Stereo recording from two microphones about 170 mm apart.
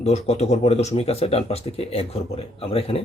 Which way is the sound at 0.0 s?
40° left (ahead or behind).